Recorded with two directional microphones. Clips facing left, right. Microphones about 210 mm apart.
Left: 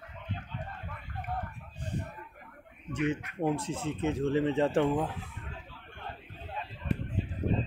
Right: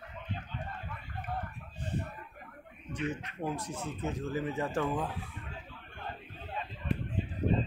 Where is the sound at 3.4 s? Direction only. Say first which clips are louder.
Left 6 dB; 25° left (ahead or behind).